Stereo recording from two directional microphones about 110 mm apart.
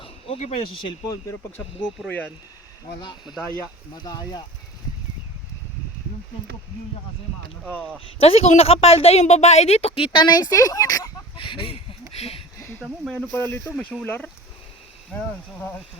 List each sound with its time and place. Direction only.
0.0 s a sound: 75° left (ahead or behind)
0.7 s speech: 50° left (ahead or behind)
2.0 s speech: 15° left (ahead or behind)
3.0 s speech: 40° left (ahead or behind)
3.4 s speech: 20° left (ahead or behind)
3.9 s speech: 40° left (ahead or behind)
8.0 s a woman's voice: 70° left (ahead or behind)
10.2 s speech: 35° left (ahead or behind)
11.3 s speech: 50° left (ahead or behind); by 12.4 s 65° left (ahead or behind)
12.5 s a sound: 25° left (ahead or behind)
12.8 s speech: 5° right (ahead or behind)
13.3 s speech: 20° left (ahead or behind)